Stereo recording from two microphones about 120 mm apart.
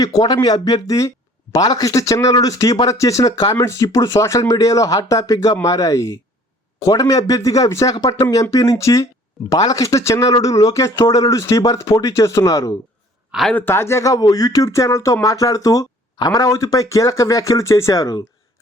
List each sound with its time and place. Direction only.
0.0 s speech: 35° left (ahead or behind)
13.5 s speech: 15° left (ahead or behind)